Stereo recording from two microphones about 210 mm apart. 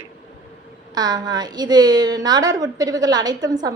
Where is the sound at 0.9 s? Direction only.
20° right (ahead or behind).